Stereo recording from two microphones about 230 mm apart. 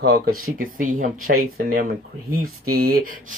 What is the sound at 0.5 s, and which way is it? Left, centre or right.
Speech, right.